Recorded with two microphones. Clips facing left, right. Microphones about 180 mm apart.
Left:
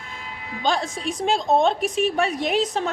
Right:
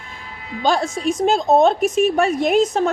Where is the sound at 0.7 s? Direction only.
45° right (ahead or behind).